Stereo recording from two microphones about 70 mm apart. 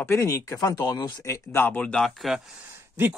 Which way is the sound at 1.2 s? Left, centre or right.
Left.